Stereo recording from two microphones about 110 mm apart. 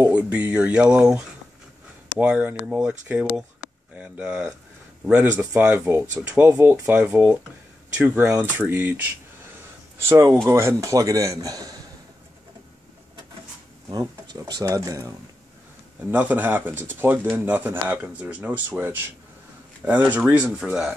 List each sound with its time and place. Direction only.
0.1 s a man's voice: 10° right (ahead or behind); by 11.7 s 35° right (ahead or behind)
13.8 s speech: 40° right (ahead or behind)
16.1 s speech: 15° right (ahead or behind)